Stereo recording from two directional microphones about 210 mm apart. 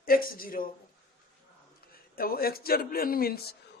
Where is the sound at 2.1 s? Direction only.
45° left (ahead or behind).